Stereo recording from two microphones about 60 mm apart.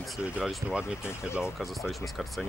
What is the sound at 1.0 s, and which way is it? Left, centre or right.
Speech, left.